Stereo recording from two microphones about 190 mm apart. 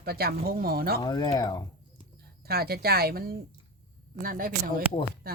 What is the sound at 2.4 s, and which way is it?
Speech, 55° right (ahead or behind).